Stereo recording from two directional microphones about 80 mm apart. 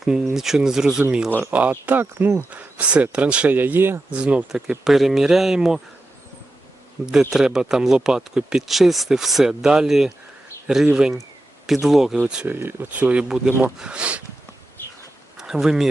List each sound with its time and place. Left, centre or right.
0.0 s speech: centre
1.4 s speech: right
4.1 s speech: centre
7.0 s speech: centre
12.5 s speech: right
15.4 s speech: centre